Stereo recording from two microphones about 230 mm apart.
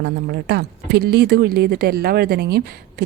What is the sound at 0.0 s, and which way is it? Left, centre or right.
Speech, right.